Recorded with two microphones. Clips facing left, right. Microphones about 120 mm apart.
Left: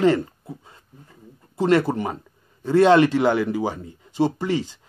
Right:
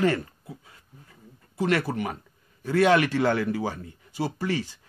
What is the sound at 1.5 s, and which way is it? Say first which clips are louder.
A man's voice: left 6 dB; 25° left (ahead or behind).